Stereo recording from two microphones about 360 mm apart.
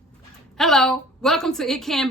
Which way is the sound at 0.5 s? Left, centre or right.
Centre.